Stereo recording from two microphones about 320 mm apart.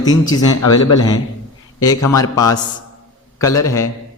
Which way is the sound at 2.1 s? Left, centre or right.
Centre.